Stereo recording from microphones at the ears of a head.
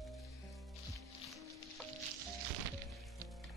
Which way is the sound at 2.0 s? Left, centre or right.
Right.